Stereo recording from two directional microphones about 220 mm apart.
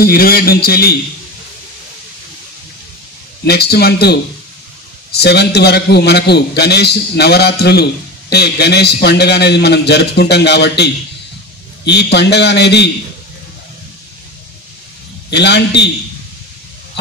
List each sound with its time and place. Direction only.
0.0 s a man's voice: 45° left (ahead or behind)
3.4 s a man's voice: 45° left (ahead or behind)
15.2 s a man's voice: 50° left (ahead or behind)